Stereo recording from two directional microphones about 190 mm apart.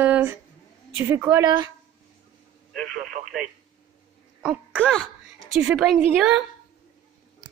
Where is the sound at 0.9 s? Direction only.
10° right (ahead or behind).